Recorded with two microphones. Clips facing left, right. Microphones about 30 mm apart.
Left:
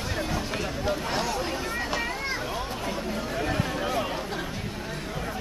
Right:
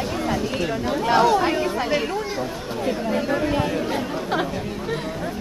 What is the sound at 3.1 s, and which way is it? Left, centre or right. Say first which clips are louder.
Speech: right 7 dB; right.